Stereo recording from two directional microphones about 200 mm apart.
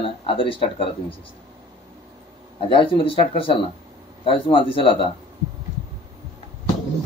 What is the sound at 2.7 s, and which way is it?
Speech, 25° left (ahead or behind).